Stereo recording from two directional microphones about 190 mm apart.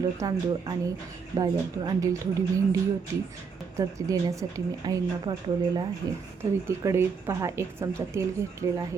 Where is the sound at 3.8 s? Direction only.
20° right (ahead or behind).